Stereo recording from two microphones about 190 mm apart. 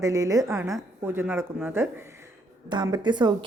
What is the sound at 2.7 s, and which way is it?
Speech, 20° right (ahead or behind).